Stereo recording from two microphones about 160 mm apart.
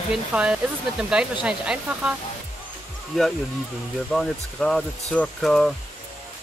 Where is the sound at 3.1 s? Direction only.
Centre (ahead or behind).